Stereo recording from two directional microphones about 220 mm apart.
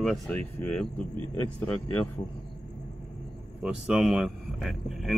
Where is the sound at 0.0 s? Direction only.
Centre (ahead or behind).